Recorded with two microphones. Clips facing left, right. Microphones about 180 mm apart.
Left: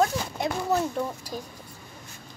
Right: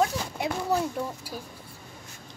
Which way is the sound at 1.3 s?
30° left (ahead or behind).